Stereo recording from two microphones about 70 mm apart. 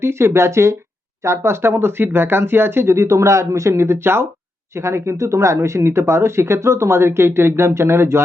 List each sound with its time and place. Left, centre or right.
0.0 s speech: right